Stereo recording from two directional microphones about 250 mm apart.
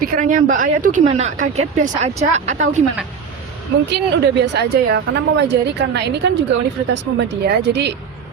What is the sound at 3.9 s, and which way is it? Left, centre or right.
A woman's voice, right.